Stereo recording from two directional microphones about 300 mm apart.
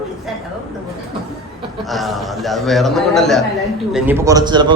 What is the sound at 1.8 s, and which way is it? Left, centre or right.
A man's voice, centre.